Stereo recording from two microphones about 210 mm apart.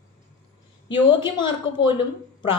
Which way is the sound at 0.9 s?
20° left (ahead or behind).